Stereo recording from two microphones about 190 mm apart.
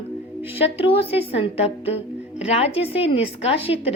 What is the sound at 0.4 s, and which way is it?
A woman's voice, 30° left (ahead or behind).